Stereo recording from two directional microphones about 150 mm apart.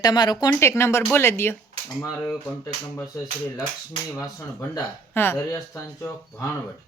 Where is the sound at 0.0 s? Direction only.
25° left (ahead or behind).